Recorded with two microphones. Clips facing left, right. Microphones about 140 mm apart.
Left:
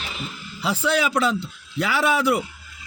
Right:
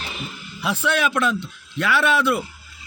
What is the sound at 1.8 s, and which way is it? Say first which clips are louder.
Speech: right 1 dB; 75° right (ahead or behind).